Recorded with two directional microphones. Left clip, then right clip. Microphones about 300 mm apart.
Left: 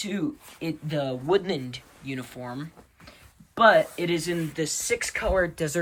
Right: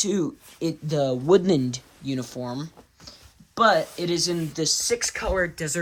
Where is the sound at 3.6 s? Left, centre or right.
Centre.